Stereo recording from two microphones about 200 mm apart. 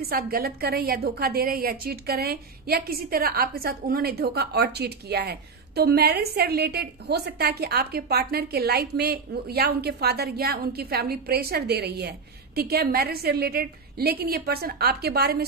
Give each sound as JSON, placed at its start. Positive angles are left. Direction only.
{"t": 0.0, "sound": "a woman's voice", "side_deg": -45}